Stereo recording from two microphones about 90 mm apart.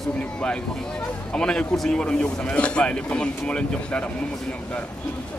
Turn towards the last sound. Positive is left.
turn(degrees=15)  # may be behind; listen again after turning